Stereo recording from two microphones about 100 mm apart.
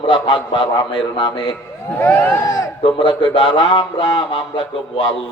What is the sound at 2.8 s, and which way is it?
A man's voice, 55° left (ahead or behind).